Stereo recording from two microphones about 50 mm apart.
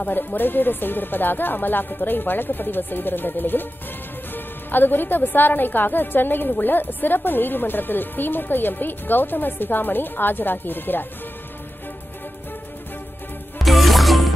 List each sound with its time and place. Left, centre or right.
0.0 s a woman's voice: left
13.6 s music: centre